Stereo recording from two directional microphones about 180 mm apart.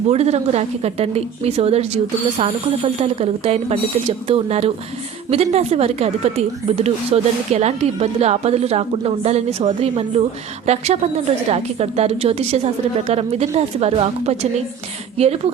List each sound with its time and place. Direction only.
0.1 s speech: 35° right (ahead or behind)